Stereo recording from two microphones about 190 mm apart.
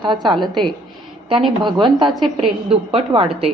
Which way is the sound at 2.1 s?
Centre (ahead or behind).